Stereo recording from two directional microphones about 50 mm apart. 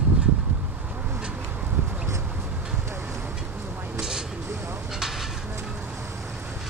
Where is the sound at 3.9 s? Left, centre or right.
Centre.